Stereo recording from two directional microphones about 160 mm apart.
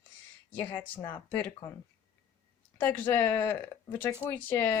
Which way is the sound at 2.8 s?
10° left (ahead or behind).